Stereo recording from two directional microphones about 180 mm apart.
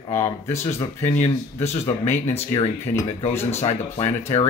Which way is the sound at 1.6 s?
35° left (ahead or behind).